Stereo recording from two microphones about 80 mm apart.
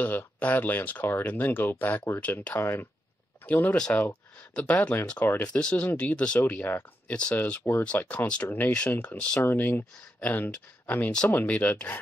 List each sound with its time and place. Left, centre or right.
0.0 s speech: left
3.7 s speech: centre
5.5 s speech: centre